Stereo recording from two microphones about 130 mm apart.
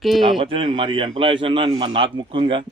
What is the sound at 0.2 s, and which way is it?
Speech, 40° right (ahead or behind).